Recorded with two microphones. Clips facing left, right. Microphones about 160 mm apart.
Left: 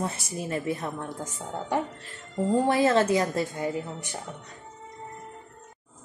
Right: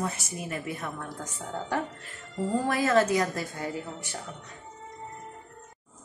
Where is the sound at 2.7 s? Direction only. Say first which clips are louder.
Even; 25° left (ahead or behind).